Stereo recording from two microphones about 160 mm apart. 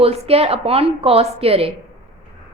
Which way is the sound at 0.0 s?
40° right (ahead or behind).